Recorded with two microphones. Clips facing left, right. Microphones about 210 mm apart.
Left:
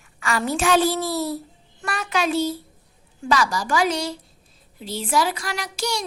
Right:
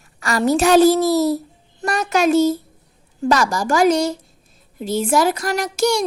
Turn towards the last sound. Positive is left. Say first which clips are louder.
# right 9 dB
turn(degrees=-50)  # may be behind; listen again after turning